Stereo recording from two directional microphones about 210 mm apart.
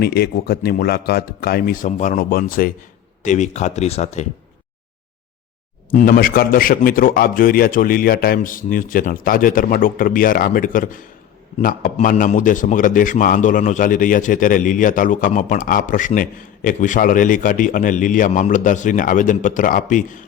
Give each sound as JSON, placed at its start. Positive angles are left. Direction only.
{"t": 0.0, "sound": "a man's voice", "side_deg": 50}
{"t": 5.9, "sound": "a man's voice", "side_deg": 40}